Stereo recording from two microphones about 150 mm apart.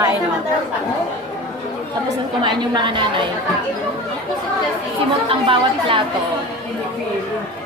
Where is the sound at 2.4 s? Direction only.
30° right (ahead or behind).